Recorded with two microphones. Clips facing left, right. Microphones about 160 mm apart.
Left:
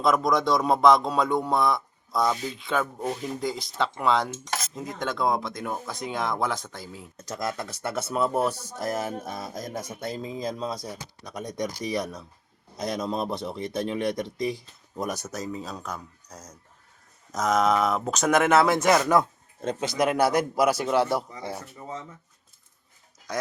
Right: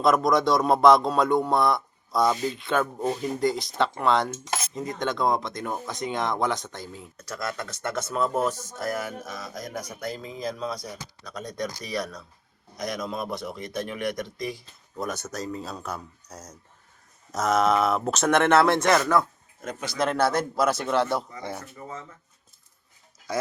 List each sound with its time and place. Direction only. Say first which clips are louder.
0.0 s cutlery: right 2 dB; centre (ahead or behind)
7.2 s a man's voice: left 2 dB; 20° left (ahead or behind)
8.8 s speech: left 1 dB; 25° left (ahead or behind)
14.9 s cutlery: even; 10° left (ahead or behind)
19.6 s a man's voice: left 3 dB; 20° left (ahead or behind)